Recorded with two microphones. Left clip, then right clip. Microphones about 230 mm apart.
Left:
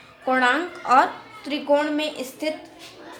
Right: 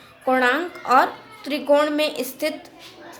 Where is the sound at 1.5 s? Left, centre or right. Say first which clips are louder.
Right 3 dB; right.